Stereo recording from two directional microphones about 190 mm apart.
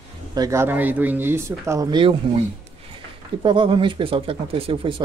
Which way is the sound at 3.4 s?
25° right (ahead or behind).